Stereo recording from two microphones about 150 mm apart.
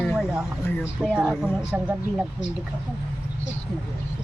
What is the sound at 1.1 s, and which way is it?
Speech, 5° right (ahead or behind).